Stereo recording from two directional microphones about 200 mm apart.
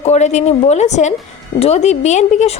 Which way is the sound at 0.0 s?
35° left (ahead or behind).